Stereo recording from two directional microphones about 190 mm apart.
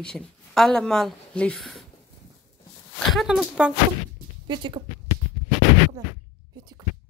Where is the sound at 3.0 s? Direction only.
Centre (ahead or behind).